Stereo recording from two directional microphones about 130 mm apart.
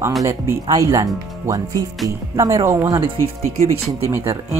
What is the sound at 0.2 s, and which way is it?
Speech, 25° right (ahead or behind).